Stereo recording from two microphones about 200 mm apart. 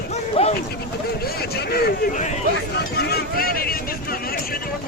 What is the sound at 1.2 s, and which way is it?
Speech, 50° left (ahead or behind).